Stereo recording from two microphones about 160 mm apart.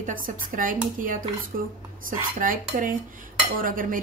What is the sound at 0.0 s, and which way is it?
A woman's voice, 60° right (ahead or behind).